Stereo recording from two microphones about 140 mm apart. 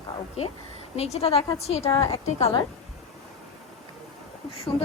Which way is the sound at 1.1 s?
45° left (ahead or behind).